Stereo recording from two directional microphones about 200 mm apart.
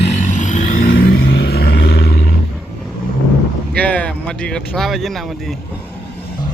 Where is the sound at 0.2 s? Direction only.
40° left (ahead or behind).